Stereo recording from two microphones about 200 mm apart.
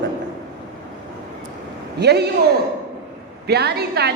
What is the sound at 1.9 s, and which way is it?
Speech, 55° right (ahead or behind).